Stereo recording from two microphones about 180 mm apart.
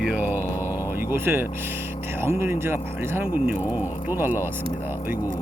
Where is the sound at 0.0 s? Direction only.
5° right (ahead or behind).